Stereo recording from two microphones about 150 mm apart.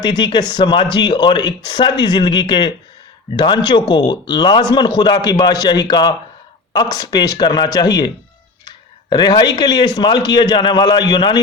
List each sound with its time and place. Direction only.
0.0 s a man's voice: 30° left (ahead or behind)